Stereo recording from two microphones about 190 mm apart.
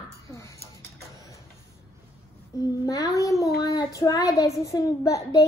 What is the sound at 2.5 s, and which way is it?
A child's voice, 20° left (ahead or behind).